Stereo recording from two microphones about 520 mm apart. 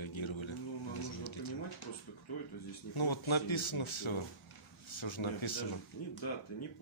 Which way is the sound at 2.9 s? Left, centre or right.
Left.